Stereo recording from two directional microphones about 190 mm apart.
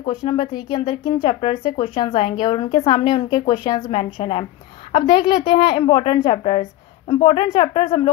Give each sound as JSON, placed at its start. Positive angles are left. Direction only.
{"t": 0.0, "sound": "a woman's voice", "side_deg": 25}